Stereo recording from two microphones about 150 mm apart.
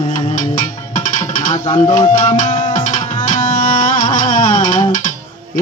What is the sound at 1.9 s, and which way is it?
Music, 55° left (ahead or behind).